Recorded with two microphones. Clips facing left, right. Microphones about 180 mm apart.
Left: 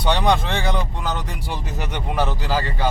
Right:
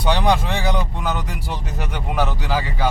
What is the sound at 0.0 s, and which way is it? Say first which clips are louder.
Speech: even; centre (ahead or behind).